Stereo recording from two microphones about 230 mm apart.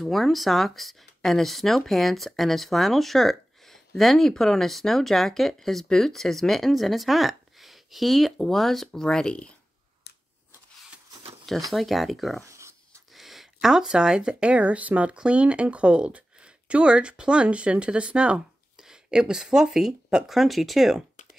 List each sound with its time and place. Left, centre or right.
0.0 s speech: centre
10.1 s scissors: left
11.7 s speech: centre
12.4 s a sound: centre
13.1 s speech: centre